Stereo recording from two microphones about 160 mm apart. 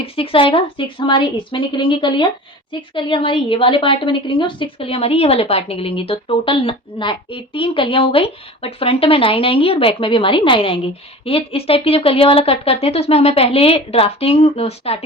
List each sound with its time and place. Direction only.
0.0 s a woman's voice: 35° left (ahead or behind)